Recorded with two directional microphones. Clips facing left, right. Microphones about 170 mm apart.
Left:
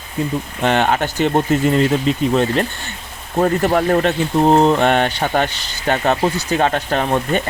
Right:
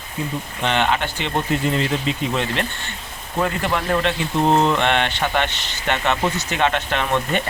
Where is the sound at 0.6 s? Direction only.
45° left (ahead or behind).